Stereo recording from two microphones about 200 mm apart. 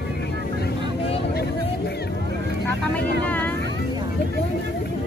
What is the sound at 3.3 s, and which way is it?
Vehicle, 10° left (ahead or behind).